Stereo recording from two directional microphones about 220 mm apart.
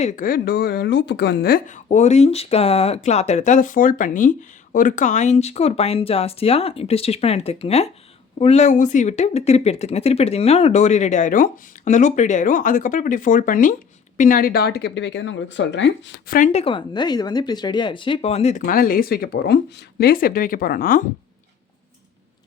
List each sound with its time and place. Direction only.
0.0 s speech: 35° left (ahead or behind); by 16.2 s 55° left (ahead or behind)
16.2 s speech: 40° left (ahead or behind)
18.6 s speech: 40° left (ahead or behind)